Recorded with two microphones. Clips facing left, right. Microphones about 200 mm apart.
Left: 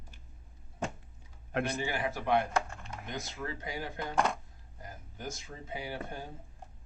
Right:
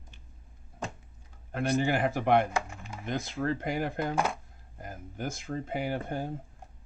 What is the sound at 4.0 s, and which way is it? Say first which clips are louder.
Speech: right 2 dB; 5° right (ahead or behind).